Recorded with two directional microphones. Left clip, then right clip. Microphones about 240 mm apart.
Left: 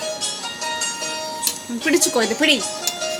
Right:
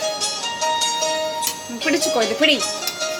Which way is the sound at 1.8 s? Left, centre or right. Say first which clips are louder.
Even; centre.